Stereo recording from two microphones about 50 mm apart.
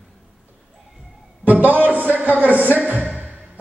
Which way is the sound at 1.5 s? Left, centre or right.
Right.